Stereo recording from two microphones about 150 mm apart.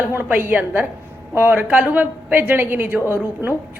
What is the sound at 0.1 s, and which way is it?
A woman's voice, 15° right (ahead or behind).